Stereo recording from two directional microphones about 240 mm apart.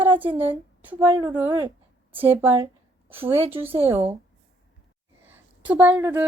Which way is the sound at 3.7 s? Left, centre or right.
Centre.